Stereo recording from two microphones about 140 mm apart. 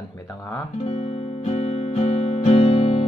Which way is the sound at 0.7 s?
50° left (ahead or behind).